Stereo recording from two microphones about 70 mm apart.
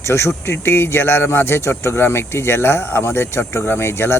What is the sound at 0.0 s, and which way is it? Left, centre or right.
Speech, left.